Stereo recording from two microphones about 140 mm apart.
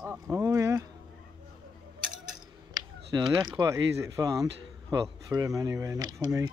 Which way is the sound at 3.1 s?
30° right (ahead or behind).